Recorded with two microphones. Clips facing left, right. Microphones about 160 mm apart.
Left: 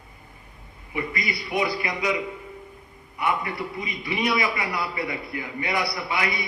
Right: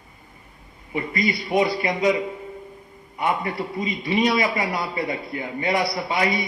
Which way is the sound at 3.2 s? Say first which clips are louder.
Right 2 dB; 30° right (ahead or behind).